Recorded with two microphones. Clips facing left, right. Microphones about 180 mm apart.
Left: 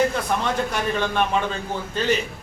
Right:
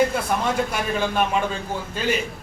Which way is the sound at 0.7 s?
10° right (ahead or behind).